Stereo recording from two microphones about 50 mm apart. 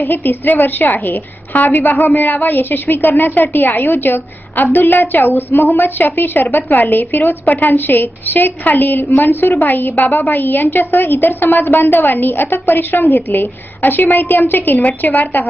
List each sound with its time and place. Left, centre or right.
0.1 s a woman's voice: left